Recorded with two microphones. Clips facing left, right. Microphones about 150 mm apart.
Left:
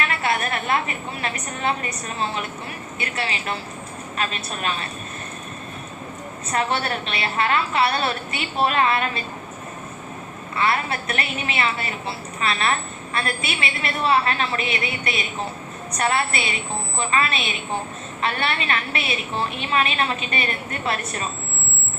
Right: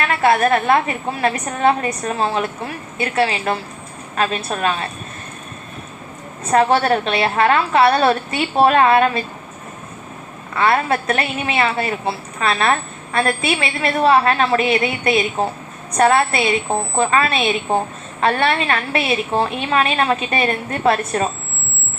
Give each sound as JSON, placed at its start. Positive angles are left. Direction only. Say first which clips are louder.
{"t": 0.3, "sound": "a woman's voice", "louder": "right 10 dB", "side_deg": -40}
{"t": 6.5, "sound": "a woman's voice", "louder": "right 9 dB", "side_deg": -45}
{"t": 10.5, "sound": "a woman's voice", "louder": "right 6 dB", "side_deg": -45}